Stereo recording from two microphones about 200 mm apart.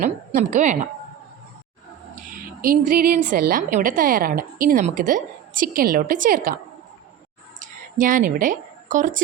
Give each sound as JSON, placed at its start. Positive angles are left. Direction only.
{"t": 0.3, "sound": "speech", "side_deg": -35}
{"t": 2.6, "sound": "a woman's voice", "side_deg": -45}
{"t": 7.6, "sound": "a woman's voice", "side_deg": -40}